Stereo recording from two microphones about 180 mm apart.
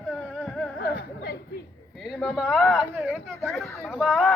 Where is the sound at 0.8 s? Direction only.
60° left (ahead or behind).